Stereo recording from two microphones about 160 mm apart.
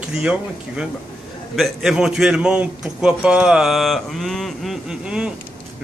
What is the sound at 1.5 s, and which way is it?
A man's voice, centre (ahead or behind).